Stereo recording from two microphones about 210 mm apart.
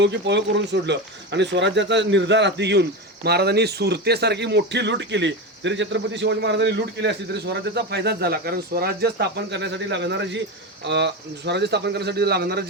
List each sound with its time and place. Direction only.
0.0 s speech: 55° right (ahead or behind)